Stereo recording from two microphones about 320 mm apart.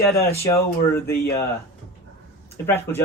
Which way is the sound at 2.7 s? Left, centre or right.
Centre.